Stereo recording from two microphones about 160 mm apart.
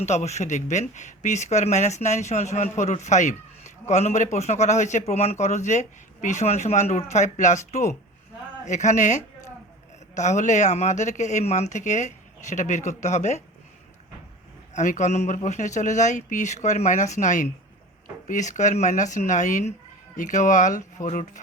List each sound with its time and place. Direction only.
0.0 s speech: 45° left (ahead or behind)
14.7 s speech: 50° left (ahead or behind)